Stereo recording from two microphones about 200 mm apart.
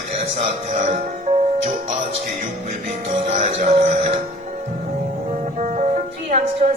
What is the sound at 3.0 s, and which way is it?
Music, 30° right (ahead or behind).